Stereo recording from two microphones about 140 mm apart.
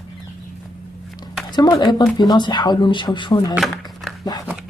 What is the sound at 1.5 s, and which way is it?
Speech, 30° left (ahead or behind).